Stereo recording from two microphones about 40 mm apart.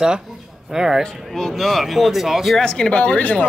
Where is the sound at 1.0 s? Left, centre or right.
Centre.